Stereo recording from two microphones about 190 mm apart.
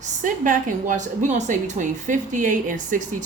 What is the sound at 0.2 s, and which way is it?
A woman's voice, 40° right (ahead or behind).